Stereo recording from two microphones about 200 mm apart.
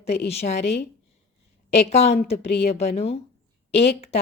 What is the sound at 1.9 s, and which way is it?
A woman's voice, 30° left (ahead or behind).